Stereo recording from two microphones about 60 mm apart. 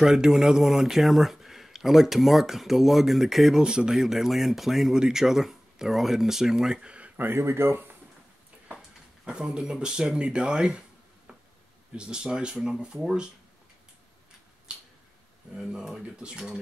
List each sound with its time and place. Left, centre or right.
0.0 s speech: centre
7.2 s speech: right
9.2 s speech: centre
11.9 s speech: centre
14.7 s tick-tock: centre
15.5 s speech: centre